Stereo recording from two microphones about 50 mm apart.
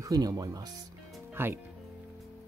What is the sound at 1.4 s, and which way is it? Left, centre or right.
Speech, right.